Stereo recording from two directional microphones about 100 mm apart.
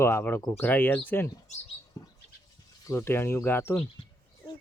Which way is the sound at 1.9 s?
30° left (ahead or behind).